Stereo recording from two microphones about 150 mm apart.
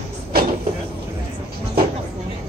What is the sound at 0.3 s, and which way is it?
Cupboard open or close, 85° right.